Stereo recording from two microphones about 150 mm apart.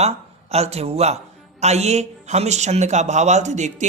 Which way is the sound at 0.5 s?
45° right (ahead or behind).